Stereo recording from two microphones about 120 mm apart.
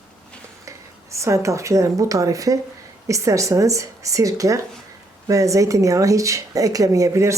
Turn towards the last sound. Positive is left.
turn(degrees=-25)  # may be behind; listen again after turning